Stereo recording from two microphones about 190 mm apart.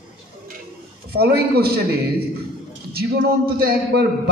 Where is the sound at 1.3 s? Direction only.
55° right (ahead or behind).